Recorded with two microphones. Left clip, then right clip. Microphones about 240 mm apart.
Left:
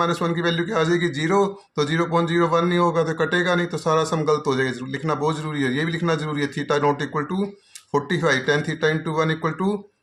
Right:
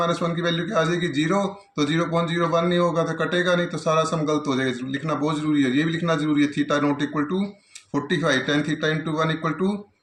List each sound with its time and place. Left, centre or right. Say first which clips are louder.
0.0 s speech: left 1 dB; left